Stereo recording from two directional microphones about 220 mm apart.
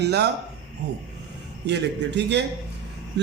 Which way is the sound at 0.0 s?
50° right (ahead or behind).